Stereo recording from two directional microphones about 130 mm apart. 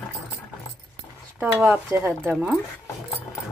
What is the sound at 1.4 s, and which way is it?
Speech, 10° right (ahead or behind).